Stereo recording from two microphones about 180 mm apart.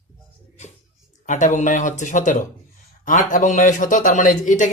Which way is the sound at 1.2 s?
45° left (ahead or behind).